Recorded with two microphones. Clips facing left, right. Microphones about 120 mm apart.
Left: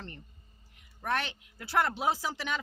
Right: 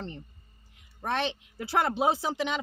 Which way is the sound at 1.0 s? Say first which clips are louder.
Right 3 dB; 25° right (ahead or behind).